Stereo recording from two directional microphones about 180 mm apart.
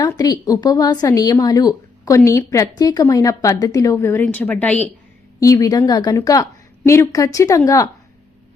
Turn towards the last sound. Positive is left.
turn(degrees=20)  # may be behind; listen again after turning